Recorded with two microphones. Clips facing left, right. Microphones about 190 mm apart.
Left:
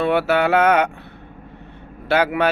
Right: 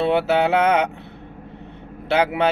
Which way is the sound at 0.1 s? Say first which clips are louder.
Left 1 dB; 20° right (ahead or behind).